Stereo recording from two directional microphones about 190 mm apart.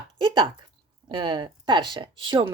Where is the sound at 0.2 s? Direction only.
25° right (ahead or behind).